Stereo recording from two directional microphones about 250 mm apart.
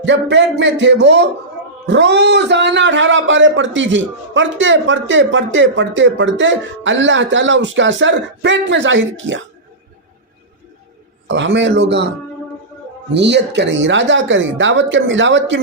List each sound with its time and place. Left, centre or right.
0.0 s speech: right
11.3 s speech: right
13.1 s speech: right